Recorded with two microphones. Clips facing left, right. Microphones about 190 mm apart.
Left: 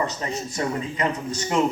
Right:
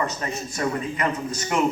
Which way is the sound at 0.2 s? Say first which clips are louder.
Even; 25° left (ahead or behind).